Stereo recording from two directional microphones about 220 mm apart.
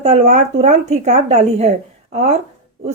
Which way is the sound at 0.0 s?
30° right (ahead or behind).